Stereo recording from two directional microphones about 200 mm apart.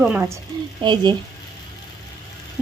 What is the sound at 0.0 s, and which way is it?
Speech, 5° right (ahead or behind).